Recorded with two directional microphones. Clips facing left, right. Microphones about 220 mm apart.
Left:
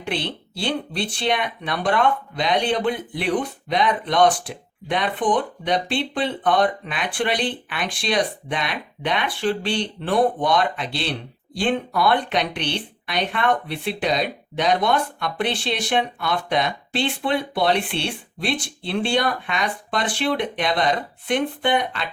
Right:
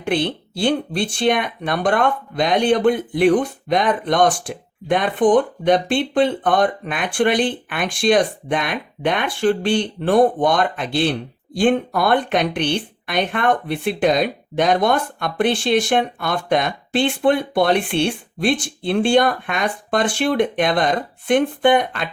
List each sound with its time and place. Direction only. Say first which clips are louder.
0.0 s speech: right 7 dB; 50° right (ahead or behind)